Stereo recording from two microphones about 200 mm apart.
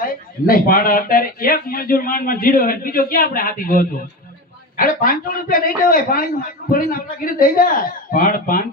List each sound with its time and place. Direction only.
0.0 s speech: 45° left (ahead or behind)